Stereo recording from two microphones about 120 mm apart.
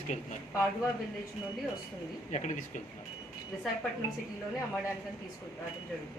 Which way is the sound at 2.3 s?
85° left.